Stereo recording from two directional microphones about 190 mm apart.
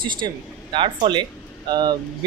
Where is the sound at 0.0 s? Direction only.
25° right (ahead or behind).